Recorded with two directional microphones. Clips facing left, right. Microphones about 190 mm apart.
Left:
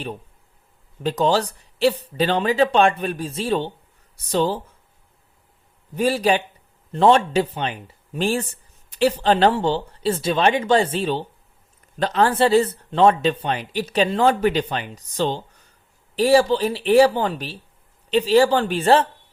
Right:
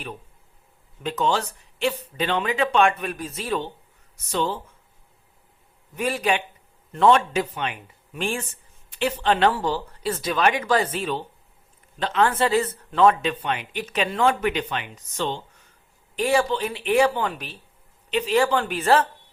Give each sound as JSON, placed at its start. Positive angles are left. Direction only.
{"t": 1.0, "sound": "speech", "side_deg": 35}
{"t": 6.0, "sound": "speech", "side_deg": 35}